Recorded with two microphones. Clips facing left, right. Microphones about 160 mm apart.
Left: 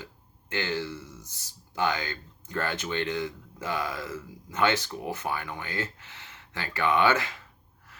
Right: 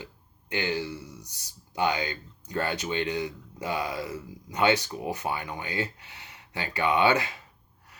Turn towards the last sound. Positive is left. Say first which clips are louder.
# right 1 dB
turn(degrees=-15)  # may be behind; listen again after turning